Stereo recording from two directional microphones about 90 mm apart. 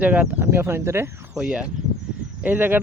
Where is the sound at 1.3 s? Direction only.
10° right (ahead or behind).